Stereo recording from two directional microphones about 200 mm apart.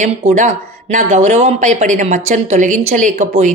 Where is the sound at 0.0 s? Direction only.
35° right (ahead or behind).